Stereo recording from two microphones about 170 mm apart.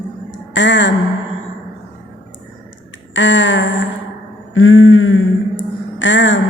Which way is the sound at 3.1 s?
90° left.